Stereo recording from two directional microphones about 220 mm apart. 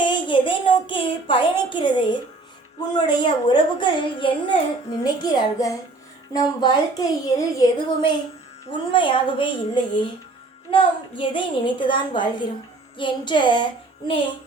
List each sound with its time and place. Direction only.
0.0 s a child's voice: 20° left (ahead or behind)